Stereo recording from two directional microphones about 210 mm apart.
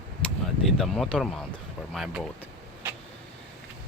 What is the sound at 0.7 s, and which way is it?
Speech, centre (ahead or behind).